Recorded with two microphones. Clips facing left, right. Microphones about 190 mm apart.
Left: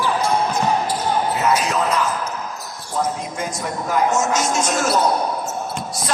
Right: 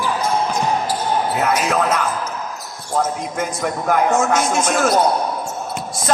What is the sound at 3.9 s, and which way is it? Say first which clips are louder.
A man's voice: right 2 dB; 55° right (ahead or behind).